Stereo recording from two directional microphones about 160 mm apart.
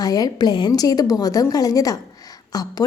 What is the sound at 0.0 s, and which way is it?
A woman's voice, 25° left (ahead or behind).